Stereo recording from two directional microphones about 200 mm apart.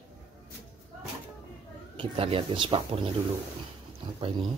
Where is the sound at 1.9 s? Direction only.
30° right (ahead or behind).